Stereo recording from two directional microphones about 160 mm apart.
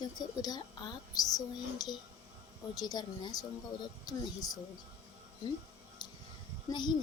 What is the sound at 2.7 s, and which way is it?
A woman's voice, 25° left (ahead or behind).